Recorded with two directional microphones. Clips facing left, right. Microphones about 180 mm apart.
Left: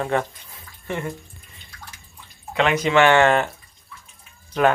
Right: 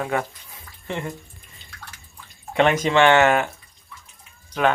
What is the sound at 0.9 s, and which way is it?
Speech, 20° right (ahead or behind).